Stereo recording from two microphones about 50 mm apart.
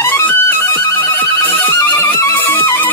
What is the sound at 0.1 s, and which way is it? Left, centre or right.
Music, left.